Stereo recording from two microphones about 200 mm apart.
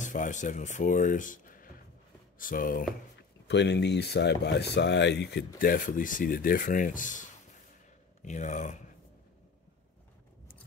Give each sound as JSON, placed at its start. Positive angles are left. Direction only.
{"t": 0.0, "sound": "speech", "side_deg": 40}
{"t": 3.4, "sound": "speech", "side_deg": 60}
{"t": 5.6, "sound": "speech", "side_deg": 45}